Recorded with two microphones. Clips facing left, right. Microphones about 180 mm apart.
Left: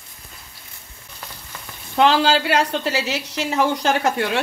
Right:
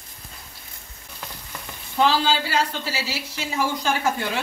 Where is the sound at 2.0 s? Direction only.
70° left (ahead or behind).